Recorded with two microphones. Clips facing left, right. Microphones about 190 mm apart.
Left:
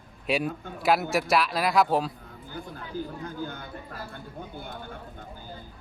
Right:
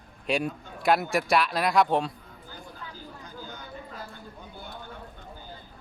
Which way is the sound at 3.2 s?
55° left (ahead or behind).